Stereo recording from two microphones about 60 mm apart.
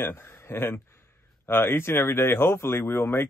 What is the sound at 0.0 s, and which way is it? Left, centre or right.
Speech, left.